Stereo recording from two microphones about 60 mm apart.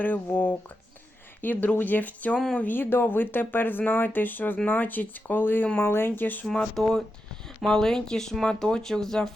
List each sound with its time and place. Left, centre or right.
0.0 s speech: left
6.4 s speech: centre